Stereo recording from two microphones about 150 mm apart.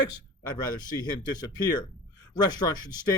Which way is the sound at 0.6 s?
25° left (ahead or behind).